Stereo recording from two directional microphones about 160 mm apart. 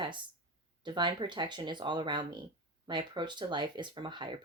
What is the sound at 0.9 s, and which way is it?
Speech, 30° right (ahead or behind).